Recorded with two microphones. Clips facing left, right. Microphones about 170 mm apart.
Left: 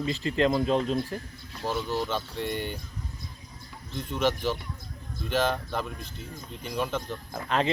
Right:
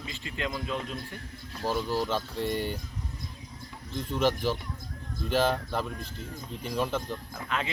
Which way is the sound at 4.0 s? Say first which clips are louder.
Even; centre (ahead or behind).